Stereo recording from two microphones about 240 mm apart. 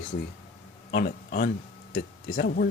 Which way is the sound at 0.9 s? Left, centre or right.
Left.